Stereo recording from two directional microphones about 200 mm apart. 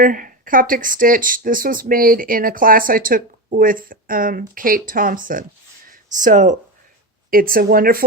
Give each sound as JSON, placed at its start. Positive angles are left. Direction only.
{"t": 0.0, "sound": "speech", "side_deg": -45}